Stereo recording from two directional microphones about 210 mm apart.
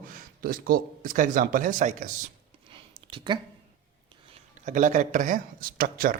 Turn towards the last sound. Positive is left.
turn(degrees=-45)  # may be behind; listen again after turning